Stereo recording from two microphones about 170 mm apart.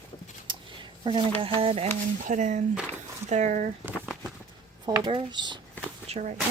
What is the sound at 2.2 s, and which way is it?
Speech, 45° right (ahead or behind).